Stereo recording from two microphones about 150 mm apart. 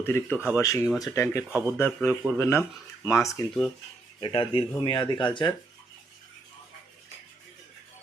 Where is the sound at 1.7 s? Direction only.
10° left (ahead or behind).